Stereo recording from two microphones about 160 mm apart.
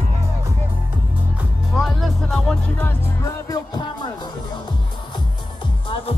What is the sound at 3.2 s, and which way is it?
Music, 20° left (ahead or behind).